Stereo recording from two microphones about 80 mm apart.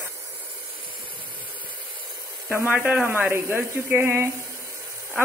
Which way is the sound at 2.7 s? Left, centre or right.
Right.